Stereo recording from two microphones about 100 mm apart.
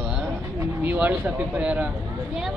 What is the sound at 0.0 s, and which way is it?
Bird, 10° right (ahead or behind).